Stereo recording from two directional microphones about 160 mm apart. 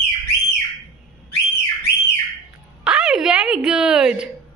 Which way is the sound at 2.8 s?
5° right (ahead or behind).